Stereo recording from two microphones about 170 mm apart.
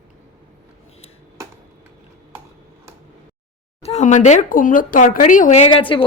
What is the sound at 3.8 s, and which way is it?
Speech, 40° left (ahead or behind).